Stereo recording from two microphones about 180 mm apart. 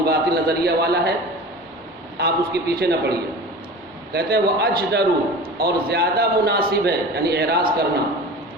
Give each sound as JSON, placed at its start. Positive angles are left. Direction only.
{"t": 0.0, "sound": "a man's voice", "side_deg": -60}
{"t": 2.1, "sound": "a man's voice", "side_deg": -65}
{"t": 4.1, "sound": "a man's voice", "side_deg": -60}